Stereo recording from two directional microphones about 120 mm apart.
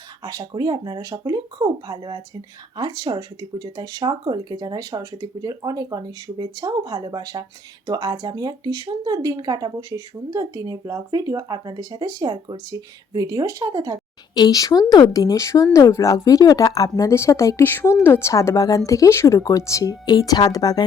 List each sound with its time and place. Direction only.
0.2 s speech: 35° right (ahead or behind)
14.3 s speech: 35° left (ahead or behind)